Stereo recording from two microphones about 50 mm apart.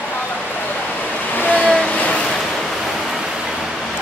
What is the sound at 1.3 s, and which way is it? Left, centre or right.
Vehicle, left.